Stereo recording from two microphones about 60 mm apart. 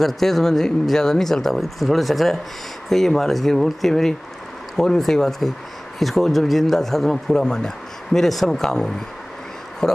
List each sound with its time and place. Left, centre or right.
0.0 s speech: centre